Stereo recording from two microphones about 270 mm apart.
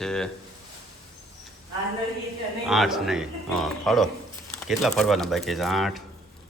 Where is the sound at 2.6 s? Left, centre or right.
Centre.